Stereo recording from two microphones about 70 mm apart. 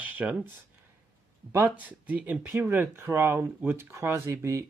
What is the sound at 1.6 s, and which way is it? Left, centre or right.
Speech, right.